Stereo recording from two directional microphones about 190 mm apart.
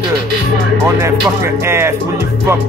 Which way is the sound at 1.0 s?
15° right (ahead or behind).